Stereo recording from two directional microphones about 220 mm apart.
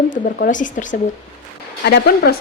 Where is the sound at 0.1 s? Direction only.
40° left (ahead or behind).